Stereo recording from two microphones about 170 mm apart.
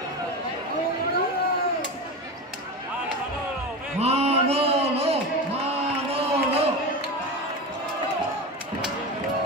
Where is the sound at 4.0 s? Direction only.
35° right (ahead or behind).